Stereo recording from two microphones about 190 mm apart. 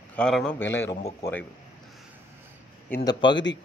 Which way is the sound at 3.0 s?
25° left (ahead or behind).